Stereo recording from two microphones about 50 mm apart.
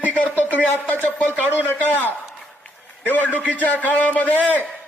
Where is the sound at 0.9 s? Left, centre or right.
Left.